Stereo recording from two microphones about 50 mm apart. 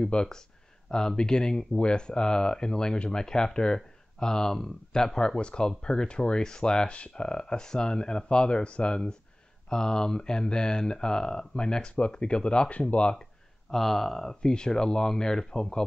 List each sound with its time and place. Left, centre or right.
0.0 s speech: centre
6.9 s speech: left
7.2 s speech: centre
13.7 s speech: centre